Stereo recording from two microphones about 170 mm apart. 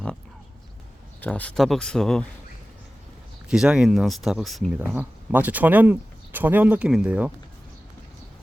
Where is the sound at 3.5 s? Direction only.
5° right (ahead or behind).